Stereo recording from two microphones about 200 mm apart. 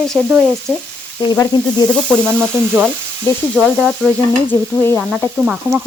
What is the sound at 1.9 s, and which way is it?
Sizzle, 5° left (ahead or behind).